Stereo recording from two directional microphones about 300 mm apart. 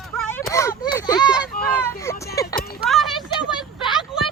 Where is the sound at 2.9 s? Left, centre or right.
Centre.